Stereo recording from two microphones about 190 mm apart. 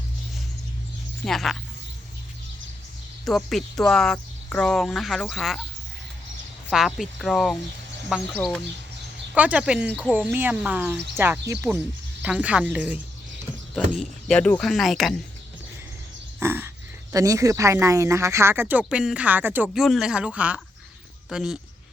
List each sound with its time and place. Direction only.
1.2 s speech: centre (ahead or behind)
3.2 s speech: centre (ahead or behind)
6.7 s speech: centre (ahead or behind)
9.3 s speech: 5° right (ahead or behind)
16.4 s speech: 10° right (ahead or behind)